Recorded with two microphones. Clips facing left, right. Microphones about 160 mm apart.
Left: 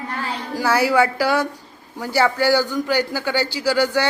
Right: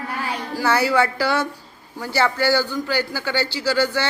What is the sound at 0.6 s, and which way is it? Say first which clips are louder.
A man's voice: left 2 dB; 10° left (ahead or behind).